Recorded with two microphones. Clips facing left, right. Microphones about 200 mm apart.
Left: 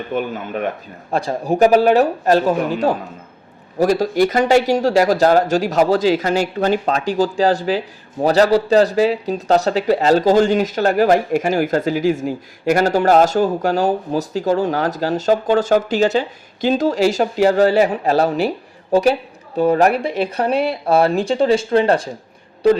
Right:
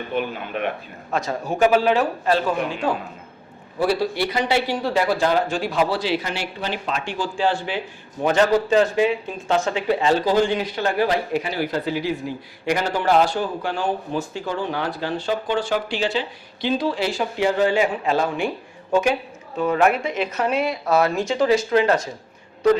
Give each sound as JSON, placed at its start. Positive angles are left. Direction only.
{"t": 0.1, "sound": "speech", "side_deg": 45}
{"t": 1.1, "sound": "speech", "side_deg": 35}